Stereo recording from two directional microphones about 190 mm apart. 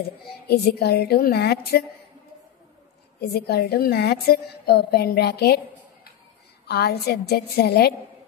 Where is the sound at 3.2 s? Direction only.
55° left (ahead or behind).